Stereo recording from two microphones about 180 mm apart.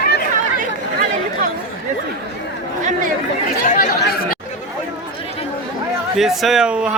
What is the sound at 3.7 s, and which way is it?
Chatter, 50° left (ahead or behind).